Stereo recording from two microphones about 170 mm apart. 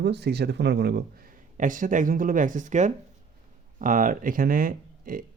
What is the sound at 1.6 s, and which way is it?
Speech, 50° right (ahead or behind).